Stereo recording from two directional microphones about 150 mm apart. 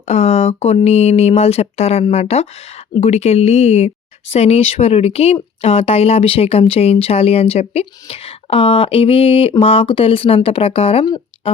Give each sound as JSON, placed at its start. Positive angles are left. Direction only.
{"t": 0.1, "sound": "speech", "side_deg": 45}